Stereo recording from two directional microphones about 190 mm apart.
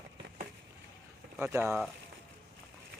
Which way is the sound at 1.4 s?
10° right (ahead or behind).